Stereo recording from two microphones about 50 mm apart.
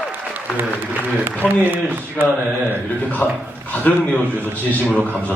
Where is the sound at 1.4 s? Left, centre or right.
Right.